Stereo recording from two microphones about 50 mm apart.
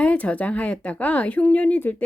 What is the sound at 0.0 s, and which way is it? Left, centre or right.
Speech, left.